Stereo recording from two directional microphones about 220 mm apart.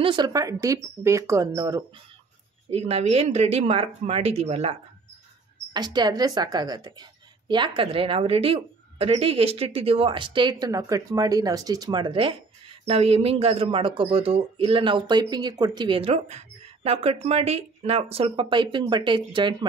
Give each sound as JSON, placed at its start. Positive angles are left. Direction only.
{"t": 0.0, "sound": "speech", "side_deg": -20}
{"t": 2.7, "sound": "a woman's voice", "side_deg": -30}